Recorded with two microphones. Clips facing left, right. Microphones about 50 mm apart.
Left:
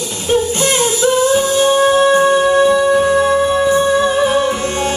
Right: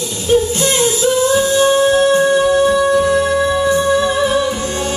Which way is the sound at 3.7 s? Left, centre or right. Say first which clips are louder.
Left 1 dB; left.